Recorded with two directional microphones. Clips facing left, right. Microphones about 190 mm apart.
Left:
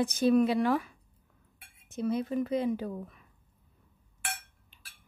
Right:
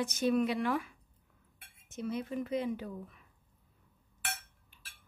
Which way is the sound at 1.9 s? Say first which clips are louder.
Left 6 dB; 35° left (ahead or behind).